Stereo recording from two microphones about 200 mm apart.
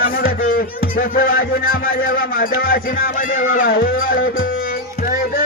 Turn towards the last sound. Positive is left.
turn(degrees=45)  # may be behind; listen again after turning